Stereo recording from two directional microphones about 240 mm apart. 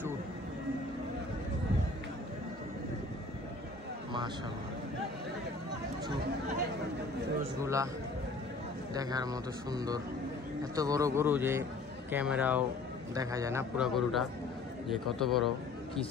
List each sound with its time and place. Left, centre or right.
7.6 s a man's voice: centre
8.9 s a man's voice: centre